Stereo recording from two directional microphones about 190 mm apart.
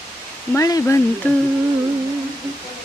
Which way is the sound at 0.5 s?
15° left (ahead or behind).